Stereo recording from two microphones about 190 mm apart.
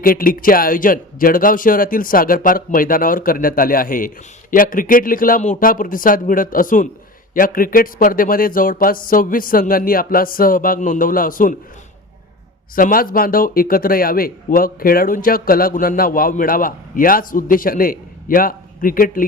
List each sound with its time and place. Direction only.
0.0 s speech: 50° left (ahead or behind)
12.7 s speech: 50° left (ahead or behind)